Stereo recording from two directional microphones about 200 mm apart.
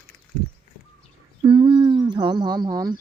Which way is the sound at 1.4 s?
25° right (ahead or behind).